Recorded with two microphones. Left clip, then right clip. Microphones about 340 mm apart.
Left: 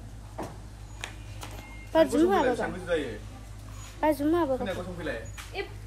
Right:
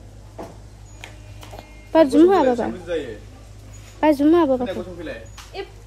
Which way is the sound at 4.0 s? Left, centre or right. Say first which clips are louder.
Right 9 dB; right.